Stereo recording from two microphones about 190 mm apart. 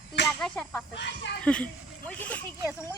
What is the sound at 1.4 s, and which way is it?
Speech, 5° left (ahead or behind).